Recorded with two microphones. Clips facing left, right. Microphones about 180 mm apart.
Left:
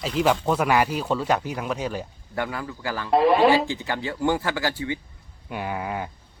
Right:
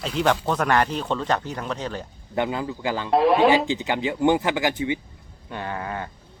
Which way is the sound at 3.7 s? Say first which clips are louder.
Right 4 dB; 20° right (ahead or behind).